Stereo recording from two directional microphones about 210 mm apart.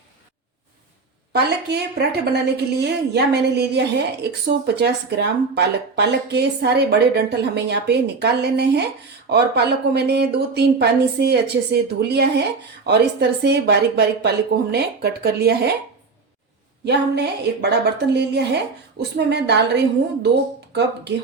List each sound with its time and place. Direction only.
1.3 s a woman's voice: 50° right (ahead or behind)
16.8 s a woman's voice: 50° right (ahead or behind)